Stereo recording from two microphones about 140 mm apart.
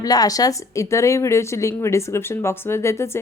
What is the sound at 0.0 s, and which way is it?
A woman's voice, 25° left (ahead or behind).